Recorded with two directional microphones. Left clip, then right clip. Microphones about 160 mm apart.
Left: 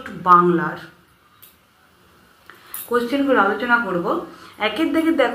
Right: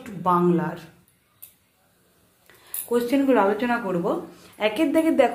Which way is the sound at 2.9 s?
30° right (ahead or behind).